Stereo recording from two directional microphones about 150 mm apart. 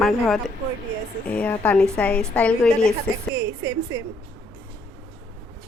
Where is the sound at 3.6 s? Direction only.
25° right (ahead or behind).